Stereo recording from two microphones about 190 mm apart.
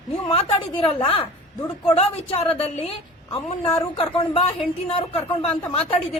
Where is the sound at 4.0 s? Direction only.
30° left (ahead or behind).